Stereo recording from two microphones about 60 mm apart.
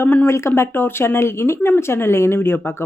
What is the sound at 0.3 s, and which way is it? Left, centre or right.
Speech, left.